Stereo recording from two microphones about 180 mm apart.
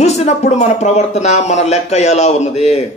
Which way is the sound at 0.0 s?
40° left (ahead or behind).